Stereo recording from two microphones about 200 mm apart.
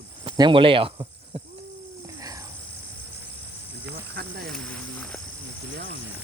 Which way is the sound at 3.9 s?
60° right (ahead or behind).